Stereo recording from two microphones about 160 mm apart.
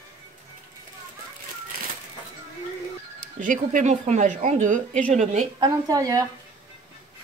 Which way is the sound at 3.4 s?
55° right (ahead or behind).